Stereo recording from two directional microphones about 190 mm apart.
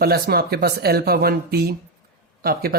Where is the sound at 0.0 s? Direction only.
55° right (ahead or behind).